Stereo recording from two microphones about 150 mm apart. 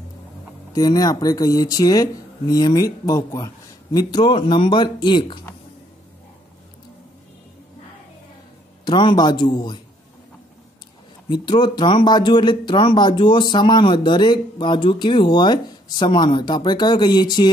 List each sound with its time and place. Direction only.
0.7 s speech: 25° left (ahead or behind)
8.8 s speech: 30° left (ahead or behind)
11.2 s speech: 30° left (ahead or behind)